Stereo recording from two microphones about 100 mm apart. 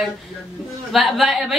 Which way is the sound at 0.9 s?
Centre (ahead or behind).